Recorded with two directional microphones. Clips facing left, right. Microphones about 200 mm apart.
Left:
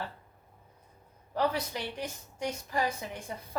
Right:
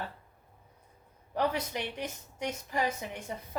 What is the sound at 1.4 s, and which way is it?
A woman's voice, 20° right (ahead or behind).